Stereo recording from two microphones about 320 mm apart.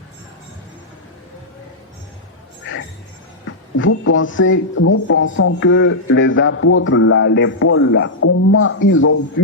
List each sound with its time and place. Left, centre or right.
3.4 s speech: left